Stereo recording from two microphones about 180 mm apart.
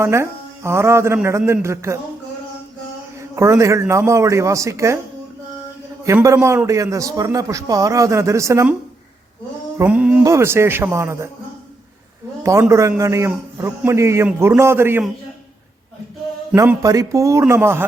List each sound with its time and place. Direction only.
0.0 s a man's voice: 15° right (ahead or behind)
3.2 s a man's voice: 15° right (ahead or behind)
6.1 s a man's voice: 15° right (ahead or behind)
9.7 s a man's voice: 10° right (ahead or behind)
12.4 s a man's voice: 15° right (ahead or behind)
16.6 s a man's voice: 20° right (ahead or behind)